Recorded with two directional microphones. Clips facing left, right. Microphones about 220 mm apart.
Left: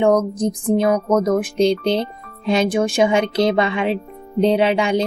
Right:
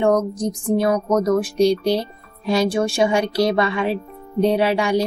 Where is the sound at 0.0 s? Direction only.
20° left (ahead or behind).